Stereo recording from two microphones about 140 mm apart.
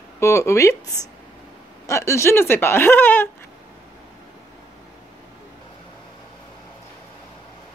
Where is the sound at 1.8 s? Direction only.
20° left (ahead or behind).